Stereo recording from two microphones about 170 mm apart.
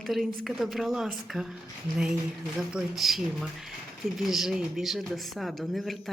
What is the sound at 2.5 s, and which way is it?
A woman's voice, 5° right (ahead or behind).